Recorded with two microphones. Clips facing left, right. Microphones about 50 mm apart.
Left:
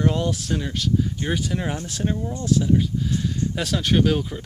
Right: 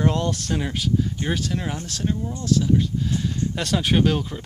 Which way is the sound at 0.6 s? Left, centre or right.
Centre.